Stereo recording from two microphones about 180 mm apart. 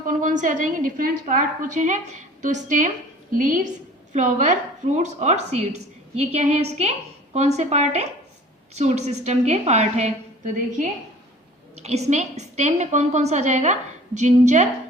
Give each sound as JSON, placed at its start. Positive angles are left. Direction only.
{"t": 0.1, "sound": "a woman's voice", "side_deg": -45}